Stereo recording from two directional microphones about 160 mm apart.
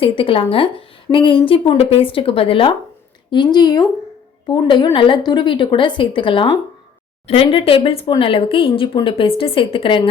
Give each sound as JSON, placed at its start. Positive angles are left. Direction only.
{"t": 0.0, "sound": "a woman's voice", "side_deg": 35}